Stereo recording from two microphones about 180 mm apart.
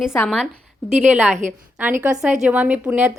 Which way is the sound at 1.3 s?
45° right (ahead or behind).